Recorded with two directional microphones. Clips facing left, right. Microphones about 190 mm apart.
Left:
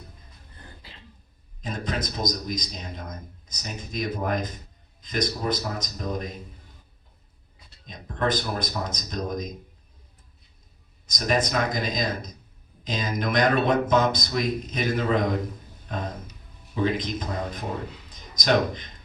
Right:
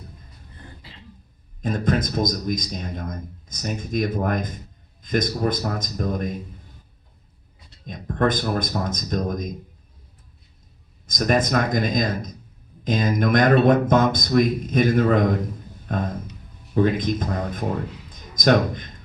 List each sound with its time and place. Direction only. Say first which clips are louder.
1.6 s a man's voice: right 8 dB; 50° right (ahead or behind)
7.9 s a man's voice: right 5 dB; 50° right (ahead or behind)
11.0 s a man's voice: right 4 dB; 50° right (ahead or behind)